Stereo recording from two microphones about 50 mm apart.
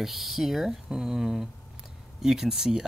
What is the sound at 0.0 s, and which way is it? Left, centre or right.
Speech, centre.